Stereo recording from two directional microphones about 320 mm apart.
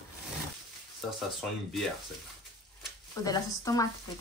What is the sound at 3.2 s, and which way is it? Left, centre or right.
Speech, centre.